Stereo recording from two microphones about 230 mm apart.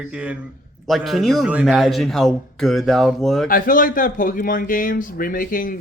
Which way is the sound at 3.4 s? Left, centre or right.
Left.